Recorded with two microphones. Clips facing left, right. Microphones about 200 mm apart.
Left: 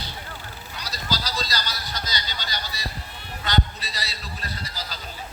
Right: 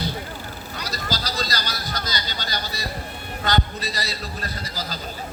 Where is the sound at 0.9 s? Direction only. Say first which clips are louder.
Right 1 dB; 50° right (ahead or behind).